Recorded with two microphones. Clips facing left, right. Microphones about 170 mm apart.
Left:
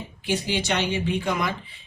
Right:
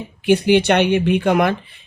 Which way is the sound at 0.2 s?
60° right (ahead or behind).